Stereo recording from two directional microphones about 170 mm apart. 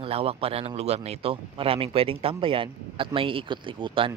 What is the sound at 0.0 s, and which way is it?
A man's voice, 35° right (ahead or behind).